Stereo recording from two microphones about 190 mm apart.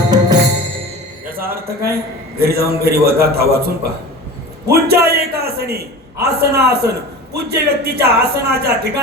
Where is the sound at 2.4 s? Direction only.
55° right (ahead or behind).